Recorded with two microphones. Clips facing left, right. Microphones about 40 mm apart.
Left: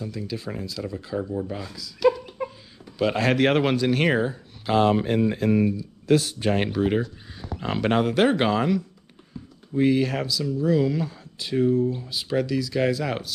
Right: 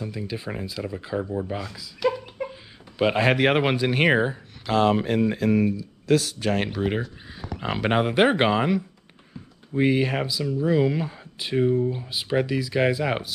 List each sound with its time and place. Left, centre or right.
0.0 s speech: right
1.8 s a sound: centre
3.0 s speech: right
4.7 s speech: right
6.7 s speech: centre; by 13.3 s right